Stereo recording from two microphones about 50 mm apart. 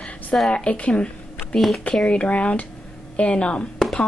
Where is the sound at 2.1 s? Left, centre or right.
Left.